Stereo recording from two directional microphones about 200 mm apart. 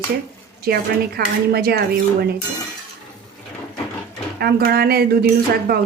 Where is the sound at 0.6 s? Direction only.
50° right (ahead or behind).